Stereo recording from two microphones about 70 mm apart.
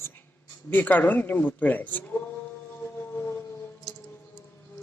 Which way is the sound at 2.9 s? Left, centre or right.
Left.